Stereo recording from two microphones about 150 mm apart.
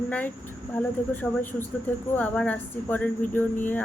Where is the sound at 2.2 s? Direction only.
10° left (ahead or behind).